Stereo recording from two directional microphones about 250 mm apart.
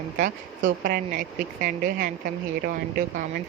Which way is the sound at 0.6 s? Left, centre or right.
Right.